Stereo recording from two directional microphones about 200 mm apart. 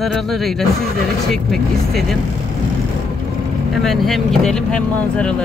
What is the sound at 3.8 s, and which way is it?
Speech, centre (ahead or behind).